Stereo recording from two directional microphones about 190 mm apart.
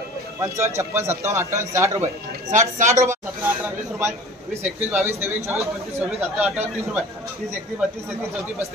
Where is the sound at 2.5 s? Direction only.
40° right (ahead or behind).